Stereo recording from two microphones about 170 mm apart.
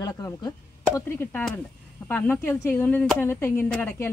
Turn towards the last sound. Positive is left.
turn(degrees=10)  # may be behind; listen again after turning